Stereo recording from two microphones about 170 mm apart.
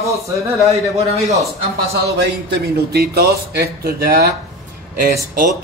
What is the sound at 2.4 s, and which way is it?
Speech, 65° right (ahead or behind).